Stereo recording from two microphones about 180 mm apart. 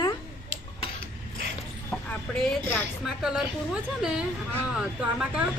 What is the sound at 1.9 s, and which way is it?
A woman's voice, 5° left (ahead or behind).